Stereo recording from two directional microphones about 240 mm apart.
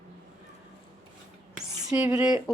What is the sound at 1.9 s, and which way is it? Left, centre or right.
Speech, centre.